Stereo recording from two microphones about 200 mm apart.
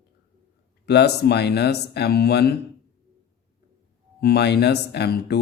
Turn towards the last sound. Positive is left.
turn(degrees=55)  # may be behind; listen again after turning